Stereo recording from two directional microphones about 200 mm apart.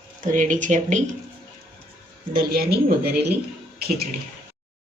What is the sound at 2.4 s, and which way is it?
Speech, 50° right (ahead or behind).